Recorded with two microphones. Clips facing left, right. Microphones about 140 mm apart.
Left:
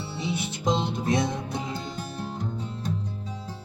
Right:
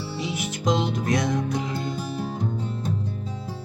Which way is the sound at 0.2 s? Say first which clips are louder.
Even; 25° left (ahead or behind).